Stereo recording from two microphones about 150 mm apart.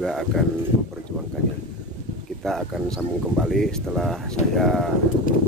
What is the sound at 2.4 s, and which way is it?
Speech, centre (ahead or behind).